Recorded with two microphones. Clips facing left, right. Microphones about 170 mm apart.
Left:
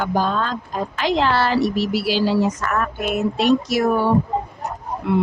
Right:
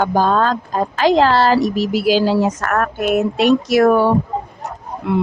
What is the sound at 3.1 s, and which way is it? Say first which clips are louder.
Speech: right 3 dB; 80° right.